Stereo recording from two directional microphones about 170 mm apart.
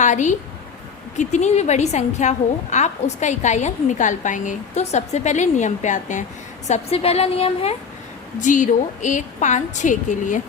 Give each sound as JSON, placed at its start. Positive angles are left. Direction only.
{"t": 0.0, "sound": "a woman's voice", "side_deg": 45}
{"t": 8.4, "sound": "a woman's voice", "side_deg": 50}